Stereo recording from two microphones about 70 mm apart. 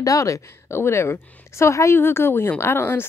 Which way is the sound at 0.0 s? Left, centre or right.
Left.